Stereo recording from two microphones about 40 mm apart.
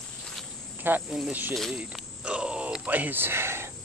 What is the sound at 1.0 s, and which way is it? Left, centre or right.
Speech, centre.